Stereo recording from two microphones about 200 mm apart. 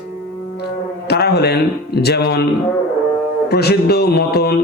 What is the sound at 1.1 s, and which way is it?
A man's voice, 55° left (ahead or behind).